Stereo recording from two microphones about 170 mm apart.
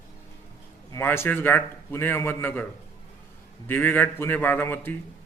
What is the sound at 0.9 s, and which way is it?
A man's voice, 15° left (ahead or behind).